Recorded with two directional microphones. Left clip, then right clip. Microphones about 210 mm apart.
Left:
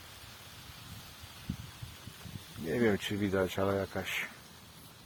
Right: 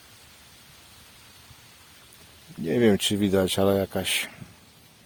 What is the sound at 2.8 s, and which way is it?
Speech, 45° right (ahead or behind).